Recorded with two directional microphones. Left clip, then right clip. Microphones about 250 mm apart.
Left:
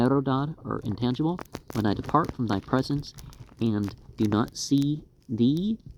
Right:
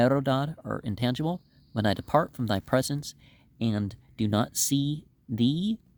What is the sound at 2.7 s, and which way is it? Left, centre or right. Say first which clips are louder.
Speech: right 1 dB; right.